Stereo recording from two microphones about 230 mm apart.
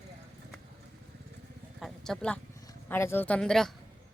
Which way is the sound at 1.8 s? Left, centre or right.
Centre.